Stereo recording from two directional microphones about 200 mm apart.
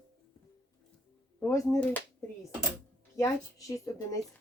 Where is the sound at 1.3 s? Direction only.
15° left (ahead or behind).